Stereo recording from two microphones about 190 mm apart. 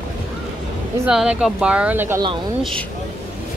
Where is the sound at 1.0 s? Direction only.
5° right (ahead or behind).